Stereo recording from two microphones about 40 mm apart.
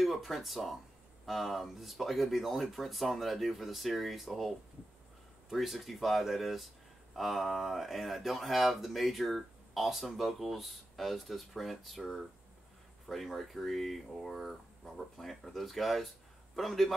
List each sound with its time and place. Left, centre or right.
0.0 s speech: centre